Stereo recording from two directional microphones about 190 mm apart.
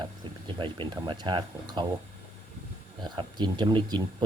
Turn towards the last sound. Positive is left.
turn(degrees=-25)  # may be behind; listen again after turning